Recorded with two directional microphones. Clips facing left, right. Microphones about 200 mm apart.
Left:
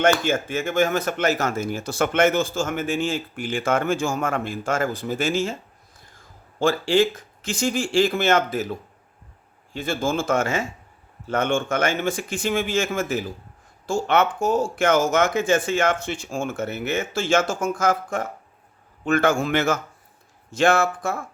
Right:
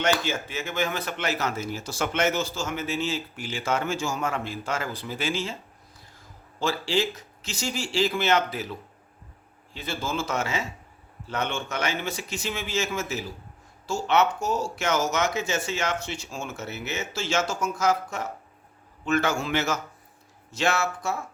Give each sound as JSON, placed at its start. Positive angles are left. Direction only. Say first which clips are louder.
{"t": 0.0, "sound": "speech", "louder": "left 6 dB", "side_deg": 50}
{"t": 6.6, "sound": "speech", "louder": "left 7 dB", "side_deg": 50}
{"t": 9.7, "sound": "speech", "louder": "left 6 dB", "side_deg": 50}